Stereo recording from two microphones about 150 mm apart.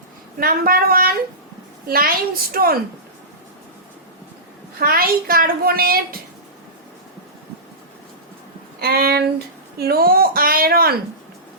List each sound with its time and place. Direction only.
0.3 s a woman's voice: 75° right (ahead or behind)
4.8 s a child's voice: 80° right
8.8 s a child's voice: 90° right